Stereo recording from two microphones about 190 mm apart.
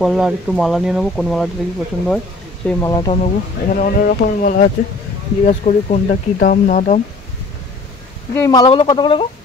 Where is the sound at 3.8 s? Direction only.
45° left (ahead or behind).